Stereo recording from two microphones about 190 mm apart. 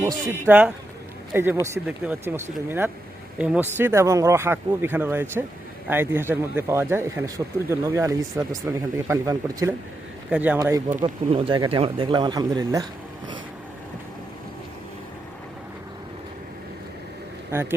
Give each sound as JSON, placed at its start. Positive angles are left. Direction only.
{"t": 0.0, "sound": "speech", "side_deg": -15}
{"t": 11.0, "sound": "speech", "side_deg": -25}
{"t": 17.5, "sound": "speech", "side_deg": -10}